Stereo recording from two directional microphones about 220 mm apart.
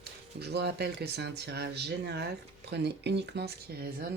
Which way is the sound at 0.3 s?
50° right (ahead or behind).